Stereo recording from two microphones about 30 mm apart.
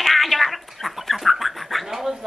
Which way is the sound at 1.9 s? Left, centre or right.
Centre.